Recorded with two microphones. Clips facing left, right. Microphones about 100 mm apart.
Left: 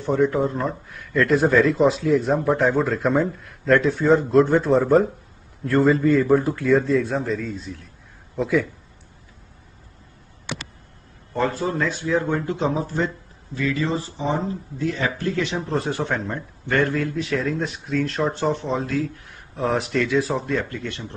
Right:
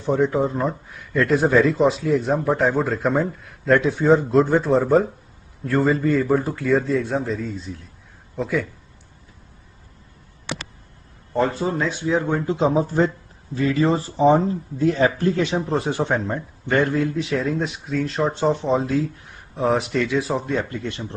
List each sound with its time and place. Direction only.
0.2 s a man's voice: 10° right (ahead or behind)
7.6 s a man's voice: centre (ahead or behind)
11.6 s speech: 10° right (ahead or behind)
12.4 s speech: 30° right (ahead or behind)
15.9 s a man's voice: 20° right (ahead or behind); by 20.5 s 5° right (ahead or behind)
20.5 s speech: 20° right (ahead or behind)